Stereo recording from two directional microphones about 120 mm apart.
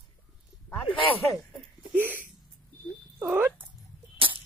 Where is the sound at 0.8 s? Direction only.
50° left (ahead or behind).